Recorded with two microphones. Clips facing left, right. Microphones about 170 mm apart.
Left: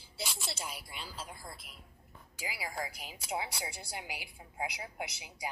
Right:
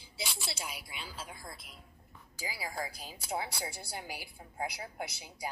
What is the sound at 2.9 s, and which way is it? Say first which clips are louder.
A woman's voice: right 1 dB; 15° left (ahead or behind).